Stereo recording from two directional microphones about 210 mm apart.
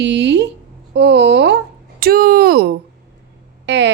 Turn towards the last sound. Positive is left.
turn(degrees=-60)  # may be behind; listen again after turning